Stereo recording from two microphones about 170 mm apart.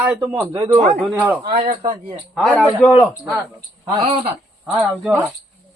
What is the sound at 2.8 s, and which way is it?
Speech, 15° left (ahead or behind).